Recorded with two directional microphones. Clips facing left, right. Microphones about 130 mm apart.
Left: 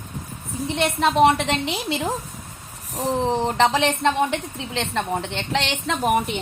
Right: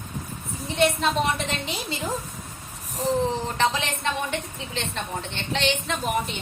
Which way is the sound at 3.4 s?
85° left.